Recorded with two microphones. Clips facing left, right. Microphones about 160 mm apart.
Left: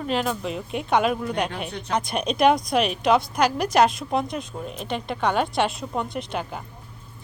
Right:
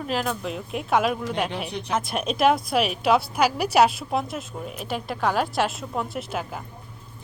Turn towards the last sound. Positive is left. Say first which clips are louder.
# left 1 dB
turn(degrees=-5)  # may be behind; listen again after turning